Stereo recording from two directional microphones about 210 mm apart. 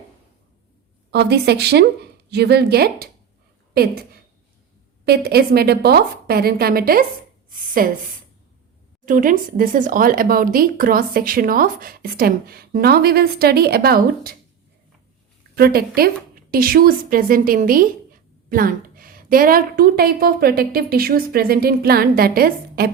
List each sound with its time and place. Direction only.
1.1 s speech: 50° right (ahead or behind)
9.0 s speech: 40° right (ahead or behind)
15.5 s a woman's voice: 45° right (ahead or behind)